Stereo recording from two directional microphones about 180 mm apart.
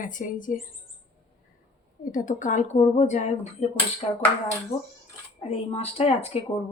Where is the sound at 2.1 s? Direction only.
45° left (ahead or behind).